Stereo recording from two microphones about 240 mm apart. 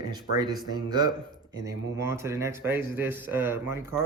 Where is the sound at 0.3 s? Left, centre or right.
Centre.